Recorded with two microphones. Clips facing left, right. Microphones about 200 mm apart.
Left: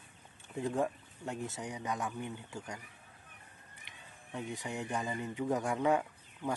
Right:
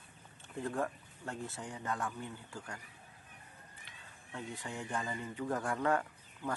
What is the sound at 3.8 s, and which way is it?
Speech, 15° left (ahead or behind).